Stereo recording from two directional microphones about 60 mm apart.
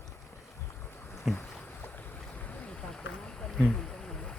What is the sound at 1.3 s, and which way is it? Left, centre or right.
Boat, centre.